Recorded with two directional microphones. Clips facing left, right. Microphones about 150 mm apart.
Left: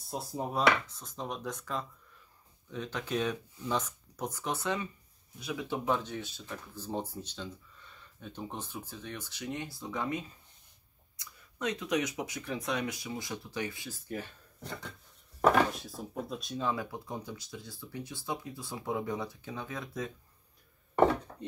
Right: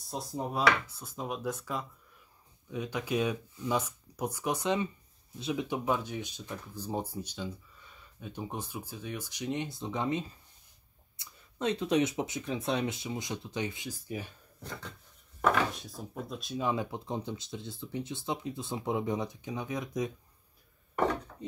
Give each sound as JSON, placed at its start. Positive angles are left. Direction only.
{"t": 0.1, "sound": "speech", "side_deg": 0}
{"t": 5.9, "sound": "speech", "side_deg": -10}
{"t": 15.9, "sound": "speech", "side_deg": 0}
{"t": 16.5, "sound": "speech", "side_deg": -20}